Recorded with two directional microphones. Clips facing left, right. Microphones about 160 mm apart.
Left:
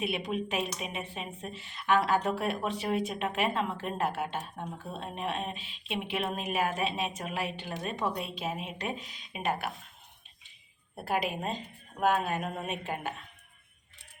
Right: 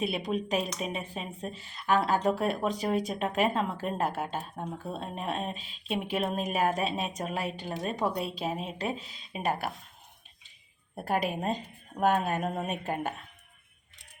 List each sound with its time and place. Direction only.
0.0 s speech: 35° right (ahead or behind)
10.9 s speech: 45° right (ahead or behind)